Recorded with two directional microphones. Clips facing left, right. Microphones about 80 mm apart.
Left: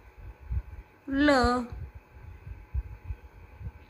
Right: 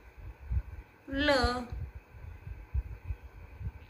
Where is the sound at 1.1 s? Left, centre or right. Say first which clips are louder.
Left 6 dB; left.